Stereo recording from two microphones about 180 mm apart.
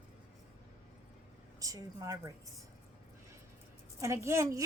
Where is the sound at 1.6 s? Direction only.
20° right (ahead or behind).